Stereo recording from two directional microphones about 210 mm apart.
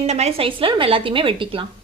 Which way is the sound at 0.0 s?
30° right (ahead or behind).